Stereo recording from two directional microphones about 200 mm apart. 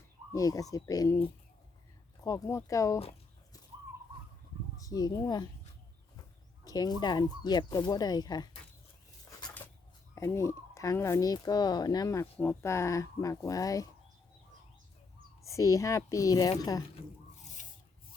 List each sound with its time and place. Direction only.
0.3 s speech: 15° left (ahead or behind)
2.2 s speech: 20° left (ahead or behind)
4.8 s speech: 20° left (ahead or behind)
6.7 s speech: 20° left (ahead or behind)
10.2 s speech: 15° left (ahead or behind)
15.4 s speech: 15° left (ahead or behind)
17.6 s rub: 40° left (ahead or behind)